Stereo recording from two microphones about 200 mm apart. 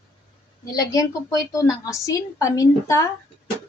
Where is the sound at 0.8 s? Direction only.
15° left (ahead or behind).